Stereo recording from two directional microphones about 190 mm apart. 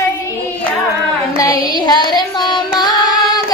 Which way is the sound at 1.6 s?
25° right (ahead or behind).